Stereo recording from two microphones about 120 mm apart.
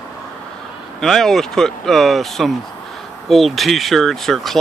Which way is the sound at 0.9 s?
5° left (ahead or behind).